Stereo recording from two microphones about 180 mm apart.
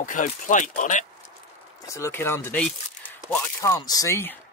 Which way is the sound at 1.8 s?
15° left (ahead or behind).